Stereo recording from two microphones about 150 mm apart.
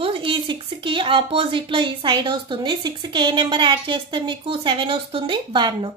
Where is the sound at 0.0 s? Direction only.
35° right (ahead or behind).